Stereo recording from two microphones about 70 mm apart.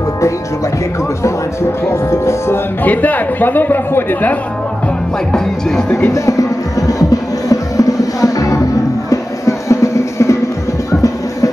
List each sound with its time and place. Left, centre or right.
1.9 s music: left
2.8 s speech: left
5.3 s speech: centre
5.9 s speech: left
6.1 s speech: left
6.9 s music: left